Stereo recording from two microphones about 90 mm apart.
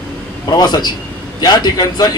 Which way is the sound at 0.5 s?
50° left (ahead or behind).